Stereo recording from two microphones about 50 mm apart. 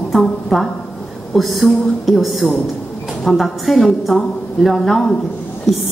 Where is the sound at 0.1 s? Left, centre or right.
Centre.